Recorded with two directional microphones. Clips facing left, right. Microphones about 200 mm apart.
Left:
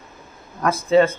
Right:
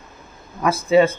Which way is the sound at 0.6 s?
10° right (ahead or behind).